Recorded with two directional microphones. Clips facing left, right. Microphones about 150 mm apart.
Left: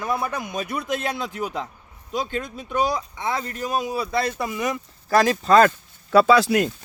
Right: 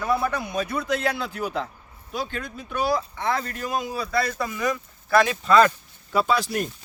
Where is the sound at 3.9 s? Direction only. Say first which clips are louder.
Left 2 dB; 20° left (ahead or behind).